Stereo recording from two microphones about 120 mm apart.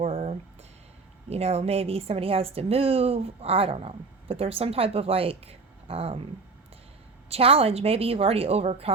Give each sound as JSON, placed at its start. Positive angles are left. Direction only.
{"t": 0.0, "sound": "music", "side_deg": -60}
{"t": 1.3, "sound": "speech", "side_deg": -60}
{"t": 7.3, "sound": "speech", "side_deg": -55}